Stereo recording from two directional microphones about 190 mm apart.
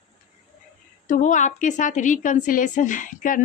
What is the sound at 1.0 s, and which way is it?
Speech, 40° left (ahead or behind).